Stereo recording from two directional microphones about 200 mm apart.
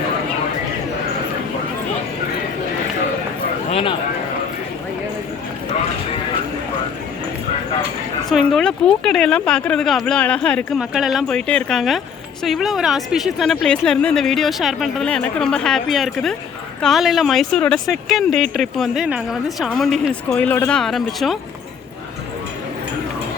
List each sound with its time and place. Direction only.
3.7 s speech: 30° left (ahead or behind)
8.3 s speech: centre (ahead or behind)